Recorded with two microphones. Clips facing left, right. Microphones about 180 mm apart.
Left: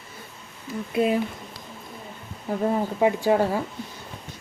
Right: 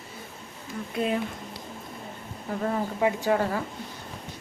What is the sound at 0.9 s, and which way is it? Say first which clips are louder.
Speech: left 5 dB; 5° left (ahead or behind).